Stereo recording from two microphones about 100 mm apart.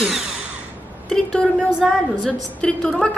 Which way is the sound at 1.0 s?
5° left (ahead or behind).